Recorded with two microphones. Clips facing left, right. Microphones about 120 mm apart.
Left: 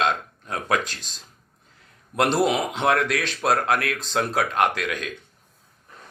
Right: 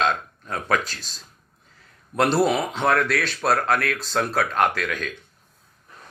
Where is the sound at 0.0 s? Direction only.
15° left (ahead or behind).